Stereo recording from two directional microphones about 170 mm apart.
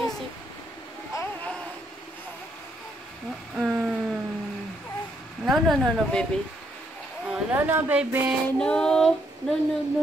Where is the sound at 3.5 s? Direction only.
5° right (ahead or behind).